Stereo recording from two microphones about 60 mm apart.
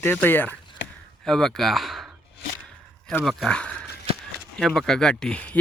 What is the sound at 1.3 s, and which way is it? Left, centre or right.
Speech, centre.